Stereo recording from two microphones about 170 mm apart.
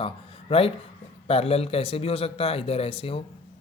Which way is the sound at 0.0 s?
35° left (ahead or behind).